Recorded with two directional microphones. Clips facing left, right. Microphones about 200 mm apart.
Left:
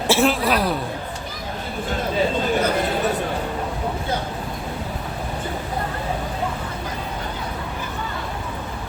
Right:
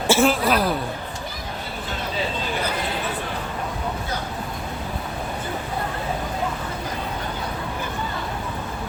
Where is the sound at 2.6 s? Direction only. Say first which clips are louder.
Left 6 dB; 45° left (ahead or behind).